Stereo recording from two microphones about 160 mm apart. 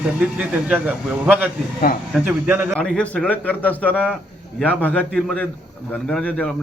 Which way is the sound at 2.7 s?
5° left (ahead or behind).